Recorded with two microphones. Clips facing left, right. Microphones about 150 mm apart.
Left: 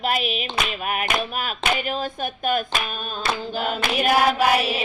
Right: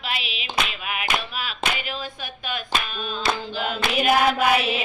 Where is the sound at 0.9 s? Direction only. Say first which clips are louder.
Left 4 dB; 45° left (ahead or behind).